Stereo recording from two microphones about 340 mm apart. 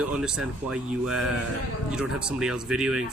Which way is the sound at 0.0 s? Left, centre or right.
Centre.